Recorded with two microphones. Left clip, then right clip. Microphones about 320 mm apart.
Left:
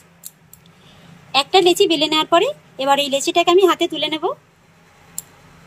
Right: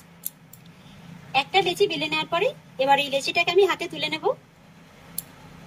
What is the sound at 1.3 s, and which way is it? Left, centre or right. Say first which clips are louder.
A woman's voice: left 8 dB; centre.